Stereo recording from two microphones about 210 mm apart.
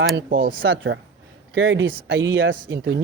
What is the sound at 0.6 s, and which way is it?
Speech, 65° right (ahead or behind).